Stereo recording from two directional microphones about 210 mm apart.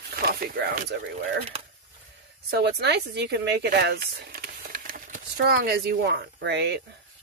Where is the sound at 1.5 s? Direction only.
30° right (ahead or behind).